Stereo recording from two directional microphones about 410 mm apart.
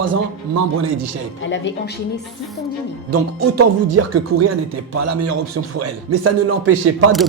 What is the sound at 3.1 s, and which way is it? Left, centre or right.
Speech, right.